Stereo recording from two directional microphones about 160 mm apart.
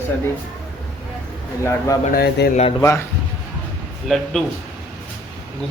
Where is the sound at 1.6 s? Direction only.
15° left (ahead or behind).